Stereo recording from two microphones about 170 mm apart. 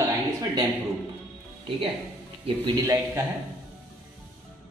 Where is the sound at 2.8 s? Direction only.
15° right (ahead or behind).